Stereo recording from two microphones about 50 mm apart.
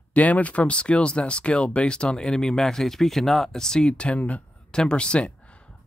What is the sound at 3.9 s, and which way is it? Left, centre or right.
Speech, left.